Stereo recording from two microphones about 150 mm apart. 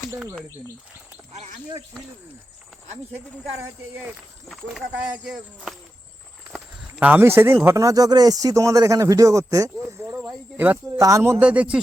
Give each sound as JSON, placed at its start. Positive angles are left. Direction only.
{"t": 1.3, "sound": "speech", "side_deg": -50}
{"t": 3.6, "sound": "speech", "side_deg": -10}
{"t": 4.4, "sound": "speech", "side_deg": 0}
{"t": 7.0, "sound": "speech", "side_deg": -15}